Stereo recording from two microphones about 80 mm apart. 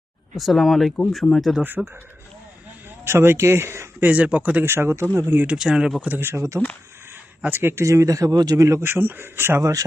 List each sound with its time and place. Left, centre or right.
0.3 s speech: centre
1.6 s speech: right
3.0 s speech: right
4.0 s speech: centre
4.6 s speech: right
5.5 s speech: centre
6.1 s speech: right